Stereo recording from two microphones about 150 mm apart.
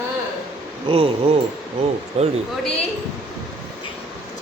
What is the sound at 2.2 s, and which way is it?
Speech, 45° right (ahead or behind).